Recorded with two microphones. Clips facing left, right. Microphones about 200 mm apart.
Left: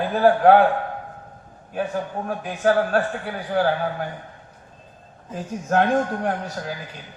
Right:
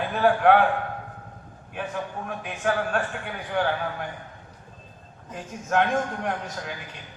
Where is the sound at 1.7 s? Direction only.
35° left (ahead or behind).